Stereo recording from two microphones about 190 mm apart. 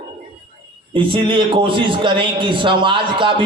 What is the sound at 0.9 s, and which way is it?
A man's voice, 25° right (ahead or behind).